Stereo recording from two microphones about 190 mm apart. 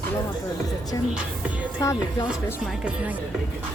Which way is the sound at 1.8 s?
15° left (ahead or behind).